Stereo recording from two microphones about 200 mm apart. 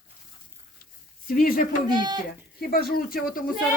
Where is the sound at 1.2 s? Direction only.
45° left (ahead or behind).